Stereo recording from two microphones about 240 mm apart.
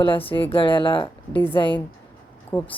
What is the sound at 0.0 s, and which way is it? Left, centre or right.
Speech, left.